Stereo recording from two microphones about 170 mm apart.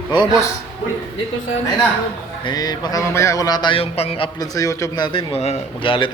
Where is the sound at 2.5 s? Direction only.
25° left (ahead or behind).